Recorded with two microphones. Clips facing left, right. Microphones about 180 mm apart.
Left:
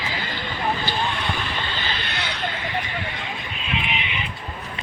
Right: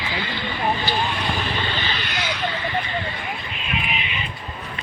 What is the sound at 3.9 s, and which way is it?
Vehicle, 20° left (ahead or behind).